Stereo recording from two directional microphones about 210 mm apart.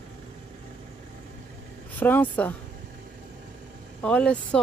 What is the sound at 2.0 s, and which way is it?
Speech, 10° left (ahead or behind).